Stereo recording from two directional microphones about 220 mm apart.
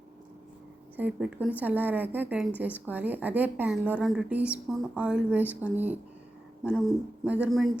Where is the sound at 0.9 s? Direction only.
5° right (ahead or behind).